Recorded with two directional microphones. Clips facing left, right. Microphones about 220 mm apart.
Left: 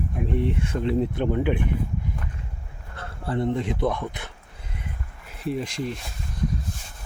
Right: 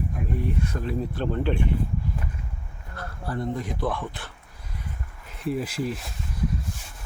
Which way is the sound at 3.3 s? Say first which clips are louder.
Left 5 dB; 25° left (ahead or behind).